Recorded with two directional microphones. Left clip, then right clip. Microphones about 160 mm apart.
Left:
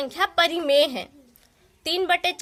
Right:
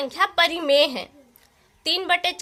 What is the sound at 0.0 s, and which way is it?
Speech, 30° left (ahead or behind).